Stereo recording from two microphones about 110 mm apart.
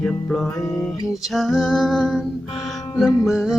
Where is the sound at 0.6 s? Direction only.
30° left (ahead or behind).